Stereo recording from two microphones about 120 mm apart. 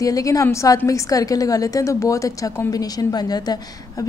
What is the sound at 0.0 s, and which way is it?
A woman's voice, 30° left (ahead or behind).